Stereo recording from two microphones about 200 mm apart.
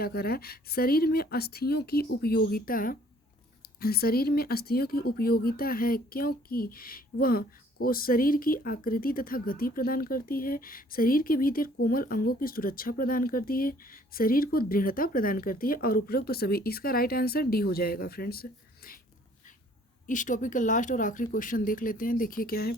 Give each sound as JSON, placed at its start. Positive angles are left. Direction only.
{"t": 0.0, "sound": "speech", "side_deg": 50}
{"t": 20.1, "sound": "speech", "side_deg": 40}